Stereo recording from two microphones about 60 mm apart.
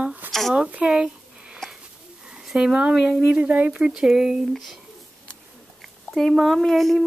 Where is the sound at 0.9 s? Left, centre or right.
Centre.